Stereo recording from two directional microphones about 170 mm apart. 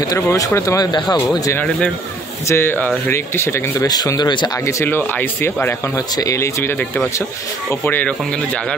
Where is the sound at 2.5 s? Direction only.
15° left (ahead or behind).